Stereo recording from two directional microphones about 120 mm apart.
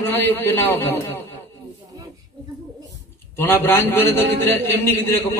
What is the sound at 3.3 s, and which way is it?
A man's voice, 20° left (ahead or behind).